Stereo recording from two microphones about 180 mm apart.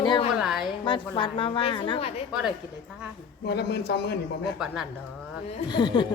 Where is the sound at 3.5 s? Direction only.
65° left (ahead or behind).